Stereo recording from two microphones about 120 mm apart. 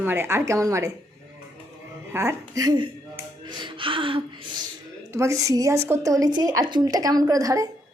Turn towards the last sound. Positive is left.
turn(degrees=-30)  # may be behind; listen again after turning